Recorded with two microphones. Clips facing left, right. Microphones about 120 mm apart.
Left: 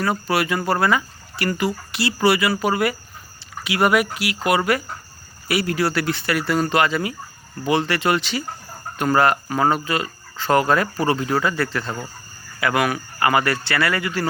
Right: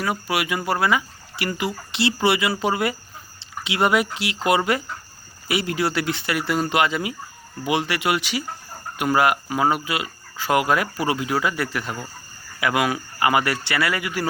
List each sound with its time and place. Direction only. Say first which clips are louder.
0.0 s speech: left 3 dB; 10° right (ahead or behind)